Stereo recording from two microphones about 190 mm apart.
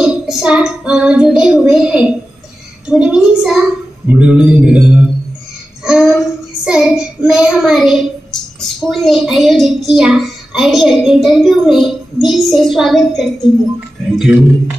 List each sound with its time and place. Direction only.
0.0 s a woman's voice: 5° right (ahead or behind)
4.1 s a sound: 5° right (ahead or behind)
5.9 s child singing: 5° right (ahead or behind)
9.8 s a woman's voice: centre (ahead or behind)